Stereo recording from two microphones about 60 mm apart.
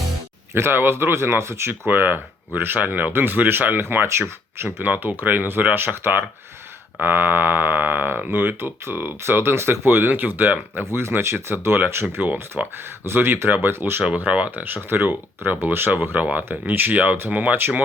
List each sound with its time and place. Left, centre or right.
0.5 s speech: right
1.9 s speech: right
4.8 s speech: right
10.8 s speech: right
12.6 s speech: right
13.1 s speech: right
14.2 s speech: right